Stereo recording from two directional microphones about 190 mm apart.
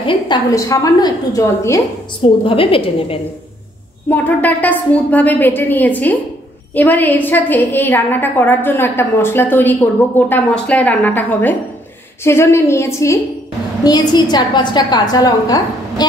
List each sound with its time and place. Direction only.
0.0 s a woman's voice: 25° left (ahead or behind)
2.4 s a woman's voice: 30° left (ahead or behind)
4.1 s a woman's voice: 10° left (ahead or behind)